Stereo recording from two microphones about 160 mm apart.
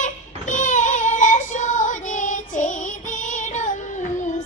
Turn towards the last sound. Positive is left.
turn(degrees=50)  # may be behind; listen again after turning